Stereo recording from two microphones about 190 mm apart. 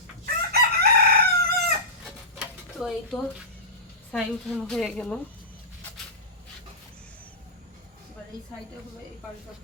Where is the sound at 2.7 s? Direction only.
Centre (ahead or behind).